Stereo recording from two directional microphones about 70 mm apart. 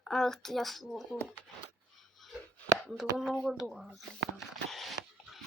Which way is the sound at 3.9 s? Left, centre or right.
Centre.